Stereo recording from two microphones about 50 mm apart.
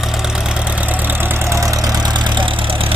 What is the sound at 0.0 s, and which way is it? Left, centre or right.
Vehicle, centre.